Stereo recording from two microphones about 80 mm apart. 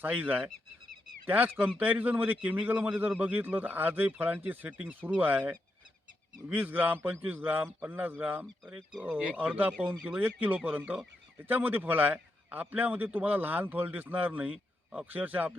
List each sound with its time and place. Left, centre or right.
0.0 s speech: right
8.6 s speech: centre